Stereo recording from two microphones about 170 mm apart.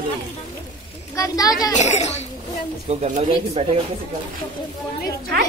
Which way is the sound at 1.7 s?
45° left (ahead or behind).